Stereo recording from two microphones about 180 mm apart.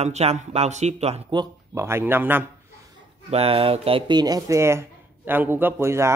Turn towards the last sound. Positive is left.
turn(degrees=-15)  # may be behind; listen again after turning